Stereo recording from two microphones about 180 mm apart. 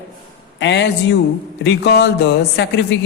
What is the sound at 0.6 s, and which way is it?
Speech, 75° left (ahead or behind).